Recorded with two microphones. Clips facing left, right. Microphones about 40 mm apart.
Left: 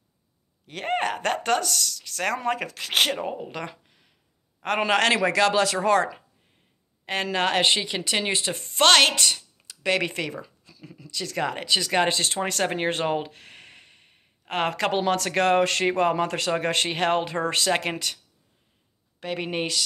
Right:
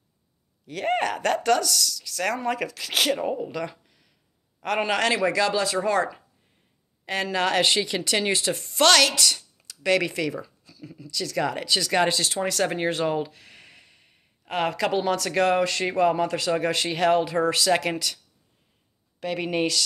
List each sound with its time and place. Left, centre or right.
0.7 s speech: left
3.3 s speech: left
4.8 s a man's voice: left
5.9 s speech: left
7.3 s a woman's voice: left
10.6 s a sound: left
11.1 s a woman's voice: left